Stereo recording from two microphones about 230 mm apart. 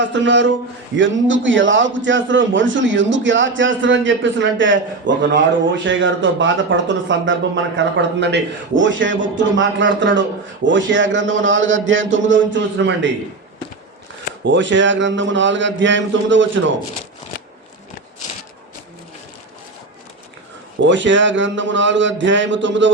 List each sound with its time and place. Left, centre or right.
0.0 s a man's voice: right
14.4 s a man's voice: right
20.8 s a man's voice: right